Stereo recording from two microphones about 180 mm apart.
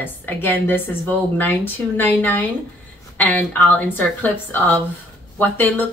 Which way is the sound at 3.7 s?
10° left (ahead or behind).